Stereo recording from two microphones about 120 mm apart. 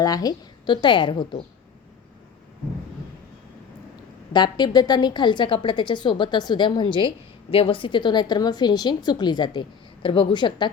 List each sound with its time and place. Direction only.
0.0 s a woman's voice: 30° left (ahead or behind)
4.3 s a woman's voice: 35° left (ahead or behind)